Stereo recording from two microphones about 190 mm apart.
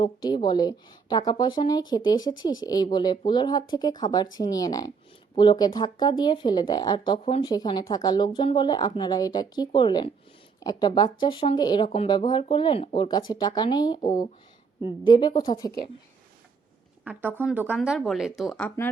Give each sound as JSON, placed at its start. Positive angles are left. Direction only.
{"t": 0.0, "sound": "speech", "side_deg": 25}
{"t": 17.0, "sound": "speech", "side_deg": -10}